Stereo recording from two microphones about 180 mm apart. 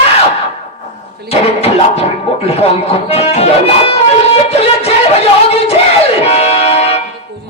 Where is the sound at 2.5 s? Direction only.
35° left (ahead or behind).